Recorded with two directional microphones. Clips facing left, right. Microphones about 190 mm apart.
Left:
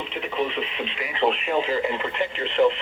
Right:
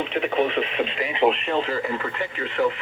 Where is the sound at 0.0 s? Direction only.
60° right (ahead or behind).